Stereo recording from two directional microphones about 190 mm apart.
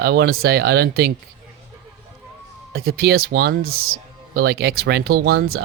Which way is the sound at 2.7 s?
55° right (ahead or behind).